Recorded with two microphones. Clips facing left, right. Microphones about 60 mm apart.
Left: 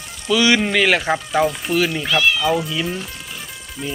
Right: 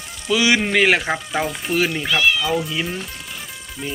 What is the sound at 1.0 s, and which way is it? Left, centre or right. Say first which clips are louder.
Speech: left 4 dB; centre.